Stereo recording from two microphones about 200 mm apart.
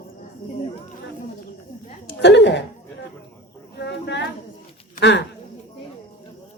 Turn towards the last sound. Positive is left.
turn(degrees=60)  # may be behind; listen again after turning